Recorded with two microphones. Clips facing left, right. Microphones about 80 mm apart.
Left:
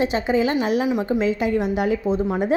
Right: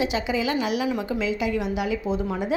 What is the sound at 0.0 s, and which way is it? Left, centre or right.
Speech, left.